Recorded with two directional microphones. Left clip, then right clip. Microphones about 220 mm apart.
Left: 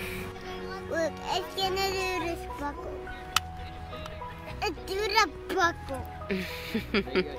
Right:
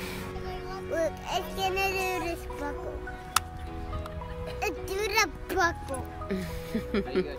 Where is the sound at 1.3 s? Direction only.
35° left (ahead or behind).